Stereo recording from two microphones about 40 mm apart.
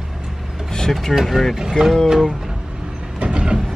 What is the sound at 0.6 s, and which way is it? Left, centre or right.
Vehicle, centre.